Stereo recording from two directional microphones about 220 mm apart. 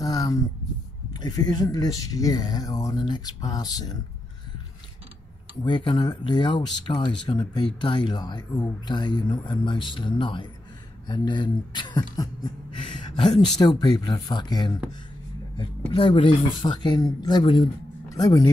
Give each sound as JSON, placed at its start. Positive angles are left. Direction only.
{"t": 0.0, "sound": "a sound", "side_deg": 15}
{"t": 1.1, "sound": "speech", "side_deg": 20}
{"t": 5.6, "sound": "speech", "side_deg": 20}